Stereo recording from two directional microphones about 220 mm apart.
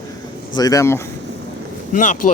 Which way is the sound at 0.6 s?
15° left (ahead or behind).